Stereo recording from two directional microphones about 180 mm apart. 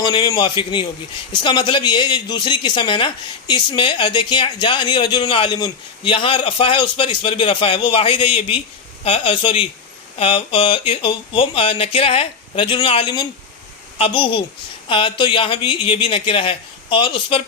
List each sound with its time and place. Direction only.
0.0 s speech: 25° left (ahead or behind)